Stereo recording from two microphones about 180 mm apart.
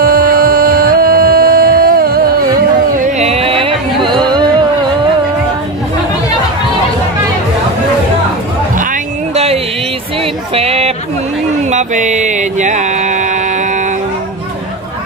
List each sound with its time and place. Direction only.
0.0 s music: 55° right (ahead or behind)
3.2 s music: 35° right (ahead or behind)
9.3 s music: 35° right (ahead or behind)
10.5 s a sound: 35° right (ahead or behind)
11.7 s music: 40° right (ahead or behind)